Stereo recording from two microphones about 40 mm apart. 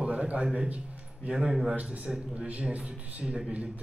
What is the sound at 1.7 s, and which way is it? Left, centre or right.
A man's voice, right.